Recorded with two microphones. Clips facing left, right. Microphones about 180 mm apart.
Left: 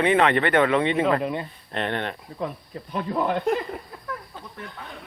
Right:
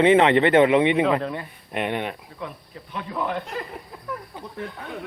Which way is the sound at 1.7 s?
10° right (ahead or behind).